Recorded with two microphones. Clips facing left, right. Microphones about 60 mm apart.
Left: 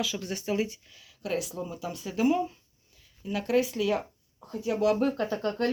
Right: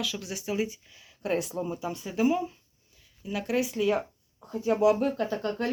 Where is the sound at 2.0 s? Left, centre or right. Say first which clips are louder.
Left 1 dB; centre.